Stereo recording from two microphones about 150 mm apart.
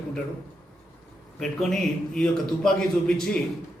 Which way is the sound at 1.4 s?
Centre (ahead or behind).